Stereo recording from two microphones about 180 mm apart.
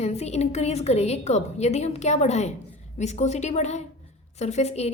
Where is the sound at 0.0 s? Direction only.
35° left (ahead or behind).